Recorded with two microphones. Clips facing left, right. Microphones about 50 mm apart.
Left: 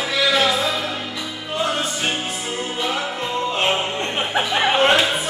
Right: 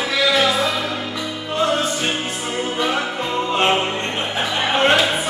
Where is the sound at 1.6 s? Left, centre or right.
Centre.